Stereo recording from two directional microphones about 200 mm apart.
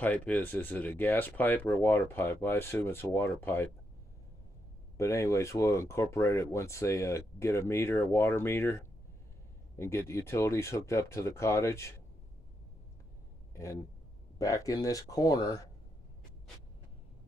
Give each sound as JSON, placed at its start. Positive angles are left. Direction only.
{"t": 0.0, "sound": "speech", "side_deg": 5}
{"t": 4.9, "sound": "speech", "side_deg": 15}
{"t": 14.4, "sound": "speech", "side_deg": 15}